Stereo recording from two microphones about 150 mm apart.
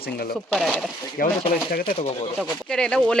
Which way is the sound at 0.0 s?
90° left.